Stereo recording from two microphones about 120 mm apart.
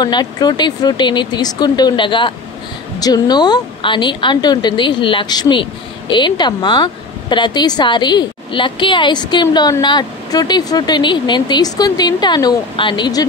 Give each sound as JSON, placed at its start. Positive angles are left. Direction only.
{"t": 0.0, "sound": "a woman's voice", "side_deg": 35}